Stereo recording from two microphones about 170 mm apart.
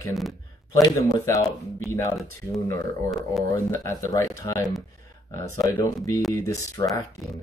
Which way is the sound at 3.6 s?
20° left (ahead or behind).